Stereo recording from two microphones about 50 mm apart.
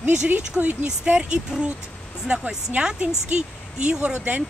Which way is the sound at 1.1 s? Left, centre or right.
Right.